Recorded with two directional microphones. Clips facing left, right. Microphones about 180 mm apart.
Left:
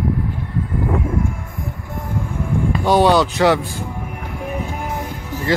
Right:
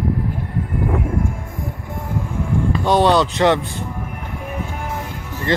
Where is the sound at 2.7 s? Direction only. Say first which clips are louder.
Left 1 dB; 5° left (ahead or behind).